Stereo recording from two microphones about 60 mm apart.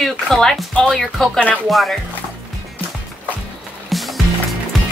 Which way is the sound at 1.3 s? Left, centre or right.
Left.